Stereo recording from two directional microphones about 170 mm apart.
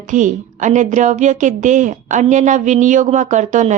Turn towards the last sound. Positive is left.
turn(degrees=-45)  # may be behind; listen again after turning